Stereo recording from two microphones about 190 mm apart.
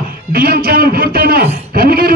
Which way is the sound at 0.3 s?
50° right (ahead or behind).